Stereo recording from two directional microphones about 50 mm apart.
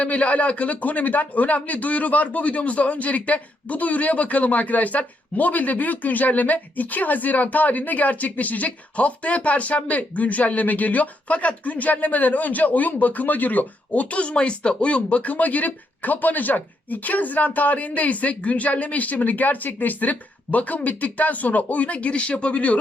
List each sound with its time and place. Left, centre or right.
0.0 s speech: left